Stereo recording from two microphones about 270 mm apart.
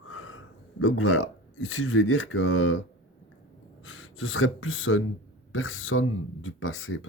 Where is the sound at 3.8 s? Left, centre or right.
Left.